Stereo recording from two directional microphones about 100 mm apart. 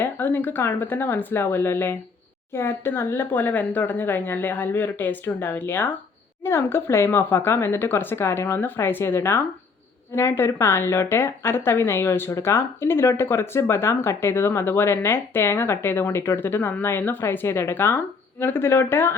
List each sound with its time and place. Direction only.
0.0 s speech: 20° left (ahead or behind)